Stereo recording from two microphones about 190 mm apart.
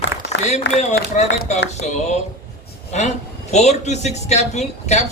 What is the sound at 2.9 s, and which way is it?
Speech, 35° left (ahead or behind).